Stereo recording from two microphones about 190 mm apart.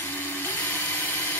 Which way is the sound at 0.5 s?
10° left (ahead or behind).